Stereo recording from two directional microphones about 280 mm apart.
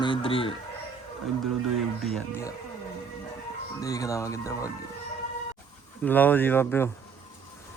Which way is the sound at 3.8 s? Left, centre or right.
Centre.